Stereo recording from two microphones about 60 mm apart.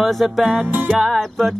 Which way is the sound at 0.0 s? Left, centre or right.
Centre.